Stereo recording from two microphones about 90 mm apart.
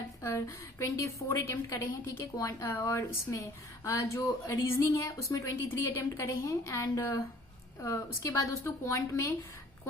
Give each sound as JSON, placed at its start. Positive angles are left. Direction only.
{"t": 0.2, "sound": "a woman's voice", "side_deg": 35}